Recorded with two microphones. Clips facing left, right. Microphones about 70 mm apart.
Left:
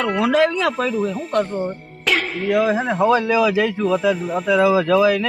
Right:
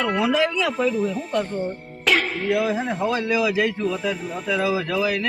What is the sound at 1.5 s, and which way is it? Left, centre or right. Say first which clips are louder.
Speech: left 3 dB; centre.